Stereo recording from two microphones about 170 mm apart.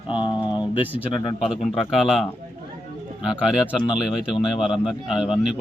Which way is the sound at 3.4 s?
5° right (ahead or behind).